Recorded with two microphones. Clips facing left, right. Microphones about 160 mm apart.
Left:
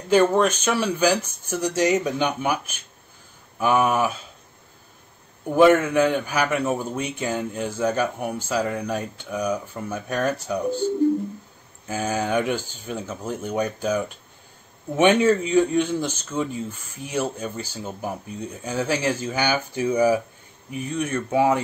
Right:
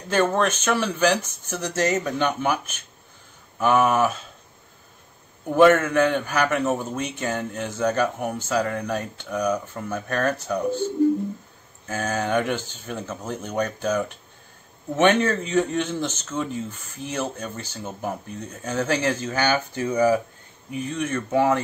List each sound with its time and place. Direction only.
0.1 s a man's voice: 10° left (ahead or behind)
5.5 s a man's voice: 10° left (ahead or behind)
11.9 s a man's voice: 10° left (ahead or behind)